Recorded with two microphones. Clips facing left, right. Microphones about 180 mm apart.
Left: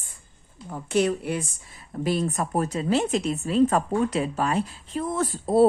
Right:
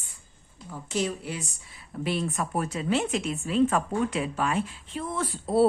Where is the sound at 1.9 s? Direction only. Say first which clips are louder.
Left 4 dB; 40° left (ahead or behind).